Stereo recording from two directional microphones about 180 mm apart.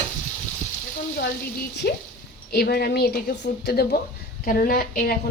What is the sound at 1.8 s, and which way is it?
Frying, 55° left (ahead or behind).